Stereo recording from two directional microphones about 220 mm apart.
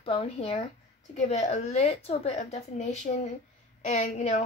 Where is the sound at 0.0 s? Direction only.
25° left (ahead or behind).